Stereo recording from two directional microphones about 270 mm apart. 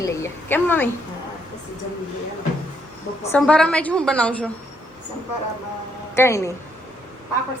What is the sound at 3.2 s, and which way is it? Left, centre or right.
A woman's voice, centre.